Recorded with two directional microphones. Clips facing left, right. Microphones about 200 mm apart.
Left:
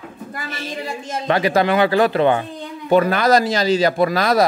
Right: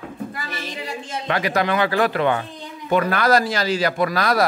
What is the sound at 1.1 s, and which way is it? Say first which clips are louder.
A child's voice: left 5 dB; 30° left (ahead or behind).